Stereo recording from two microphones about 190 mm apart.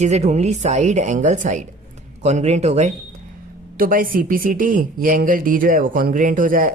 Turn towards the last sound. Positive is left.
turn(degrees=-45)  # may be behind; listen again after turning